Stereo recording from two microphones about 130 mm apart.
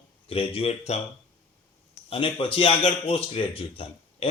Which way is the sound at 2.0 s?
45° left (ahead or behind).